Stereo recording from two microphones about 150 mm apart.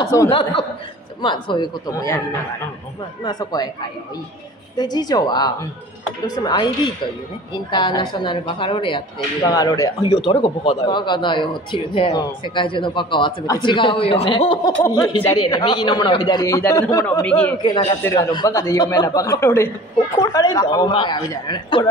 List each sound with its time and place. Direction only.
0.3 s a woman's voice: 40° left (ahead or behind); by 2.2 s 20° left (ahead or behind)
3.3 s a man's voice: 25° left (ahead or behind)
4.7 s a man's voice: 25° left (ahead or behind)
14.8 s speech: 20° left (ahead or behind)
15.4 s a man's voice: 30° left (ahead or behind)
17.3 s speech: 10° left (ahead or behind)
17.6 s a woman's voice: 30° left (ahead or behind)